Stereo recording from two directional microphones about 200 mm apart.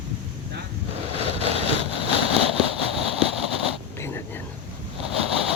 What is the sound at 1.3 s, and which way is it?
Vehicle, 30° right (ahead or behind).